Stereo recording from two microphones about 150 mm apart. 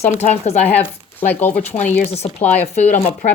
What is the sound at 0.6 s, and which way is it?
Speech, 10° left (ahead or behind).